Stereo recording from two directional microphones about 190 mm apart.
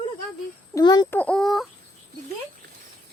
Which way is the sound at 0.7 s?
20° left (ahead or behind).